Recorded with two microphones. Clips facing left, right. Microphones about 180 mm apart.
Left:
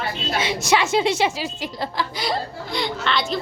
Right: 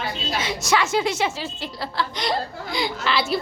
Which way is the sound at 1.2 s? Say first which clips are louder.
Left 3 dB; 15° left (ahead or behind).